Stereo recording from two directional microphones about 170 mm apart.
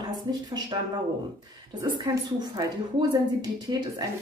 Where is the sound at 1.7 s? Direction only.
25° right (ahead or behind).